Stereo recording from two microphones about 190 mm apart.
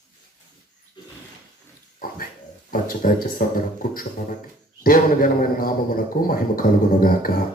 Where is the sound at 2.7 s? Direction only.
50° left (ahead or behind).